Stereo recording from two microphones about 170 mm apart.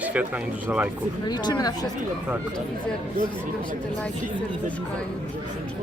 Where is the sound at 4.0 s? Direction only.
10° left (ahead or behind).